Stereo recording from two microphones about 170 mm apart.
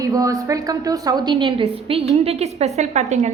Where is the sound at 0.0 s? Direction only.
20° right (ahead or behind).